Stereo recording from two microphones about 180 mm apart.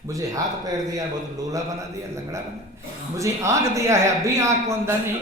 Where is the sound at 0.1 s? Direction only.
20° right (ahead or behind).